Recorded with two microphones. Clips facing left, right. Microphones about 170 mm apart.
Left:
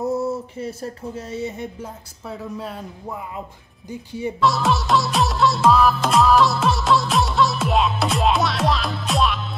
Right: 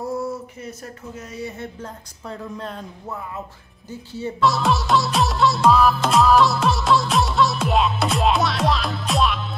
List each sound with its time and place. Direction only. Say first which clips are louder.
0.0 s speech: left 4 dB; 25° left (ahead or behind)
1.6 s speech: left 2 dB; 10° left (ahead or behind)
4.4 s music: even; centre (ahead or behind)